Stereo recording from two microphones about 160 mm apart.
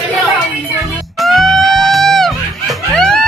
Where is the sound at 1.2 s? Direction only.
Centre (ahead or behind).